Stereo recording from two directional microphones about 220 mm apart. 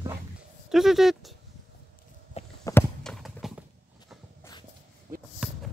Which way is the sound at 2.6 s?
5° left (ahead or behind).